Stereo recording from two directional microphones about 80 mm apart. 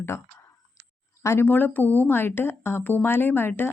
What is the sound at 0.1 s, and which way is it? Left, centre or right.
Speech, left.